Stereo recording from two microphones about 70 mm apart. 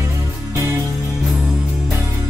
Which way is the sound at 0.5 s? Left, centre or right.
Right.